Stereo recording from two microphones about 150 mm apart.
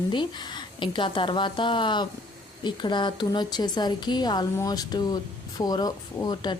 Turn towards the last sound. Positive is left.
turn(degrees=30)  # may be behind; listen again after turning